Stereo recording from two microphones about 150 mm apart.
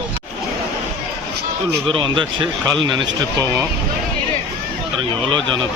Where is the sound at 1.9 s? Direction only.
35° right (ahead or behind).